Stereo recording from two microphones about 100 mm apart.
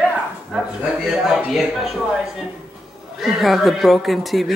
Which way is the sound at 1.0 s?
Centre (ahead or behind).